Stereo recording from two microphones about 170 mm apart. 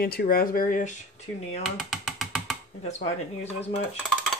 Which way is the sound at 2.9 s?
40° left (ahead or behind).